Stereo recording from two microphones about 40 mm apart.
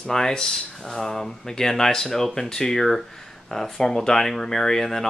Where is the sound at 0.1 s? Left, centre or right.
Centre.